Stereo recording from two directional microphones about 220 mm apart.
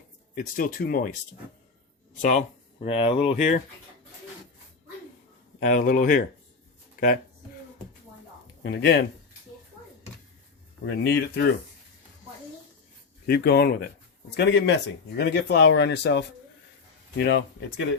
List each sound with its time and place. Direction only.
0.3 s speech: 40° left (ahead or behind)
2.8 s speech: 25° left (ahead or behind)
5.5 s speech: 35° left (ahead or behind)
8.6 s speech: 50° left (ahead or behind)
10.8 s speech: 50° left (ahead or behind)
13.2 s speech: 45° left (ahead or behind)